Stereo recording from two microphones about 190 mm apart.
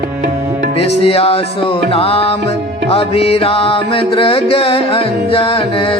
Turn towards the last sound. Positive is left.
turn(degrees=25)  # may be behind; listen again after turning